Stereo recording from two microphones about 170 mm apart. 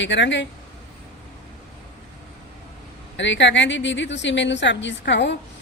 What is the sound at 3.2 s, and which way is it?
A woman's voice, 90° left.